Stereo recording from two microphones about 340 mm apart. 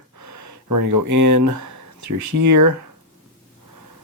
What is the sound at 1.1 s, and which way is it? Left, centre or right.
Speech, right.